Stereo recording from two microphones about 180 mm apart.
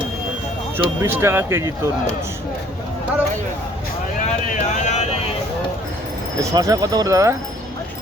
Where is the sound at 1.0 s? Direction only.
15° right (ahead or behind).